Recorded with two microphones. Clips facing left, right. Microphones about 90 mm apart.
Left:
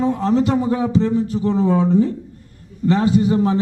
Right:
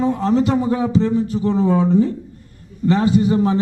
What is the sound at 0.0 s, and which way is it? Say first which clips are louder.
A man's voice: even; 15° right (ahead or behind).